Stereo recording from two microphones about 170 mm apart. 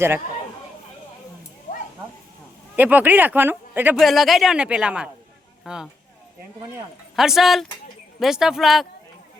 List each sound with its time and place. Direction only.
2.7 s speech: 10° right (ahead or behind)
3.9 s speech: centre (ahead or behind)
7.2 s speech: centre (ahead or behind)